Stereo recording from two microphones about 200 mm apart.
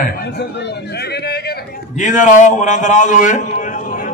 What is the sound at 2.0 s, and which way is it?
A man's voice, 40° left (ahead or behind).